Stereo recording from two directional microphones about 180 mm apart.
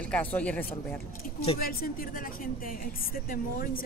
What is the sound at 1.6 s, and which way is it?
Speech, 55° left (ahead or behind).